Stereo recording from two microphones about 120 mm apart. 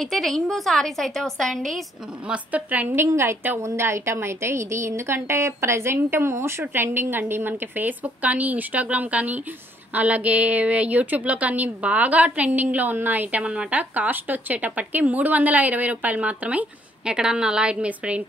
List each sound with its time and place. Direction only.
0.0 s a woman's voice: centre (ahead or behind)
2.2 s a woman's voice: 10° right (ahead or behind)